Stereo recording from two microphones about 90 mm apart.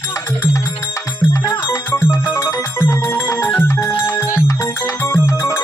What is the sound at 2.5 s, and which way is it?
Music, 30° left (ahead or behind).